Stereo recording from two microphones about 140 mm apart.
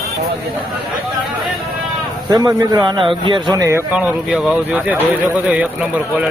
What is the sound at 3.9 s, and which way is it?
Speech, 5° right (ahead or behind).